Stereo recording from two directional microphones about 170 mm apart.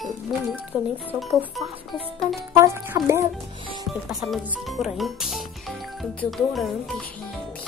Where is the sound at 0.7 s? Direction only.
10° right (ahead or behind).